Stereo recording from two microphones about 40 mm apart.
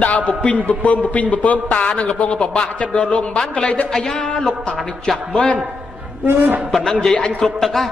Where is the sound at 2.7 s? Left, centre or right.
Left.